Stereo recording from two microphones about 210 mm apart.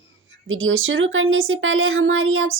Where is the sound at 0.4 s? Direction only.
70° right (ahead or behind).